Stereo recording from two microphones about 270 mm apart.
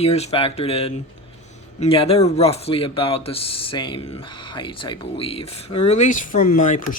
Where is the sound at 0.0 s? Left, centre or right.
Left.